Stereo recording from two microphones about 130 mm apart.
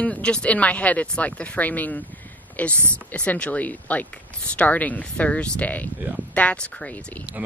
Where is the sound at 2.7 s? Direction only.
20° right (ahead or behind).